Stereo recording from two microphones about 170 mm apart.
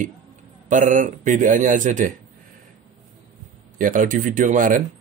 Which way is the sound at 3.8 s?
50° right (ahead or behind).